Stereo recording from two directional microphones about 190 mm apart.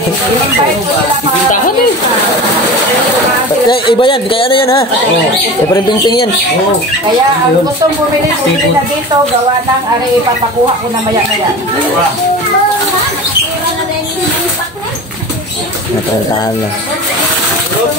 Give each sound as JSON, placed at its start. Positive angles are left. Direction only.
{"t": 3.6, "sound": "speech", "side_deg": 25}
{"t": 5.9, "sound": "speech", "side_deg": 25}